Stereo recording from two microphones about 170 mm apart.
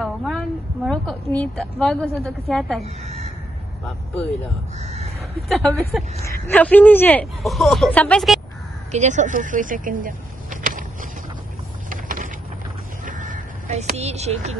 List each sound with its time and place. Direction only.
0.0 s a woman's voice: centre (ahead or behind)
2.8 s speech: 40° right (ahead or behind)
4.7 s speech: 40° right (ahead or behind)
5.5 s a woman's voice: centre (ahead or behind)
8.9 s speech: 45° right (ahead or behind)
11.9 s vehicle: 50° right (ahead or behind)
13.0 s a sound: 50° right (ahead or behind)